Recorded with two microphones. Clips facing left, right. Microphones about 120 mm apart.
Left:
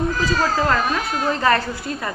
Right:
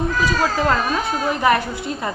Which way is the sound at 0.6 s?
20° right (ahead or behind).